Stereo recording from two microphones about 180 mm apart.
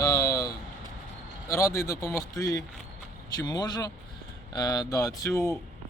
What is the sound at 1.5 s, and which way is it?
Speech, 15° left (ahead or behind).